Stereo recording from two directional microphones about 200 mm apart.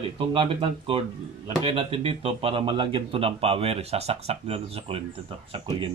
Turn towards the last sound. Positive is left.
turn(degrees=-25)  # may be behind; listen again after turning